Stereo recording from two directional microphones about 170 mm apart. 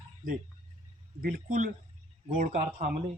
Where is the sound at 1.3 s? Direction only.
50° right (ahead or behind).